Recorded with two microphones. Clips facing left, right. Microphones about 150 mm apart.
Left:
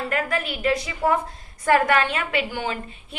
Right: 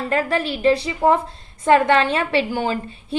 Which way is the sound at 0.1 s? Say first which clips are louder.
Right 8 dB; 30° right (ahead or behind).